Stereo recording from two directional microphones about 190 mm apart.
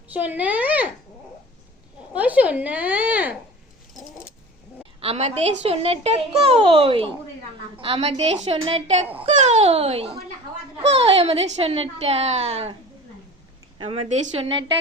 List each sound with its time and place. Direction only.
0.1 s a woman's voice: 10° right (ahead or behind)
2.1 s a woman's voice: 10° right (ahead or behind)
4.9 s a child's voice: 30° right (ahead or behind)
13.7 s a woman's voice: 30° right (ahead or behind)